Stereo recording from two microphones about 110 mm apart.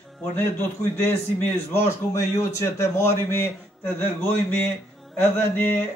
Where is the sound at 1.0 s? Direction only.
20° left (ahead or behind).